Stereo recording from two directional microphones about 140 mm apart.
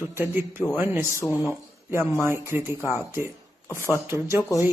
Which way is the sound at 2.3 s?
15° right (ahead or behind).